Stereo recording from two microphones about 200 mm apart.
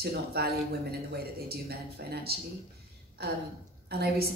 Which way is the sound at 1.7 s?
50° right (ahead or behind).